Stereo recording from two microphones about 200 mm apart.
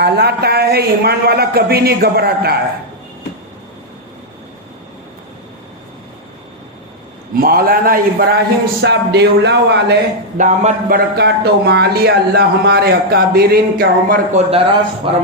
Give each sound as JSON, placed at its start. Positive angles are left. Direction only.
{"t": 0.0, "sound": "a man's voice", "side_deg": -55}
{"t": 7.3, "sound": "a man's voice", "side_deg": -45}
{"t": 10.3, "sound": "a man's voice", "side_deg": -35}
{"t": 15.1, "sound": "a man's voice", "side_deg": -30}